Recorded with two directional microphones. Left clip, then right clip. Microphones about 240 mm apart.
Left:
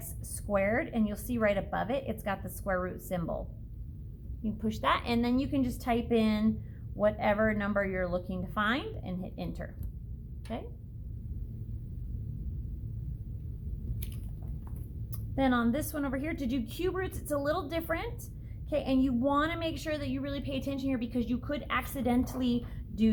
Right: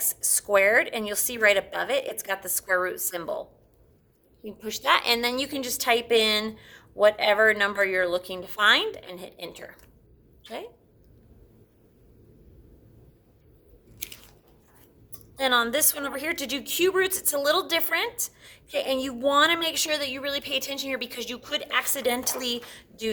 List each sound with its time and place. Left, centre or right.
0.0 s a woman's voice: right
4.6 s a woman's voice: right
15.4 s a woman's voice: right